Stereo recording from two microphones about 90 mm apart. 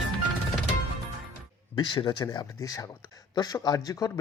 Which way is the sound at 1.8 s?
55° left (ahead or behind).